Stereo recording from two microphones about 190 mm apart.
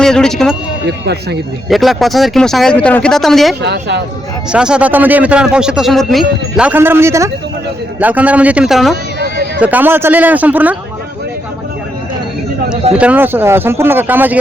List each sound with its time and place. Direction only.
0.0 s speech: 5° left (ahead or behind)
0.9 s speech: 60° right (ahead or behind)
1.7 s speech: centre (ahead or behind)
3.6 s speech: 65° right (ahead or behind)
4.5 s speech: 5° right (ahead or behind)
12.9 s speech: 5° right (ahead or behind)